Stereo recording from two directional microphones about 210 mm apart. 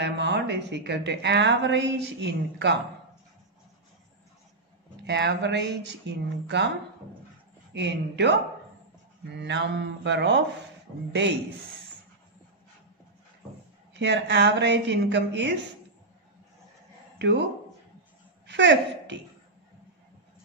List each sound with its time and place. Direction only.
0.0 s a woman's voice: 55° right (ahead or behind)
5.0 s a woman's voice: 55° right (ahead or behind)
7.7 s a woman's voice: 55° right (ahead or behind)
13.9 s a woman's voice: 55° right (ahead or behind)
17.2 s speech: 55° right (ahead or behind)
18.5 s speech: 55° right (ahead or behind)